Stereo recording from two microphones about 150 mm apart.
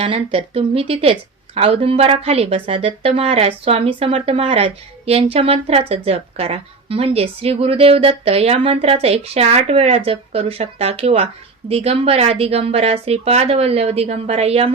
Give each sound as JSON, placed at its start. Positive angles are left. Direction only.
{"t": 0.0, "sound": "a woman's voice", "side_deg": -40}